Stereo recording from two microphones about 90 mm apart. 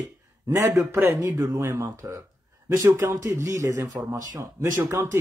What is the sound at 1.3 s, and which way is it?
Speech, 35° right (ahead or behind).